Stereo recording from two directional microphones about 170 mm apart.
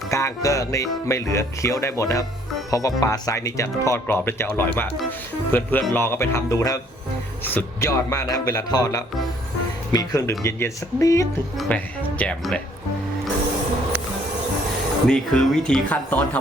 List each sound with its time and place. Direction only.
0.1 s speech: 15° left (ahead or behind)
11.5 s speech: 10° left (ahead or behind)
15.0 s speech: 5° left (ahead or behind)